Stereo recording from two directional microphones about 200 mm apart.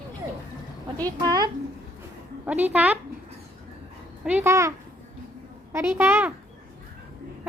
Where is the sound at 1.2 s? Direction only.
20° right (ahead or behind).